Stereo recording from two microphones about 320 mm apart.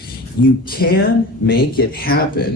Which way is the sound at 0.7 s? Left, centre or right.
Left.